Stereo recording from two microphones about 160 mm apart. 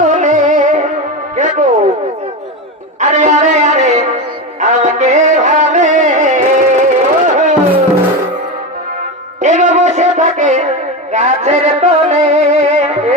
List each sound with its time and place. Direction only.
0.0 s music: 50° right (ahead or behind)
3.0 s music: 50° right (ahead or behind)
9.4 s music: 50° right (ahead or behind)